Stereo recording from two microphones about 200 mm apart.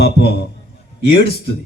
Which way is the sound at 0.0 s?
55° left (ahead or behind).